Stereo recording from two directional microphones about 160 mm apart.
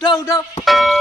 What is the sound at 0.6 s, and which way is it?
Speech, centre (ahead or behind).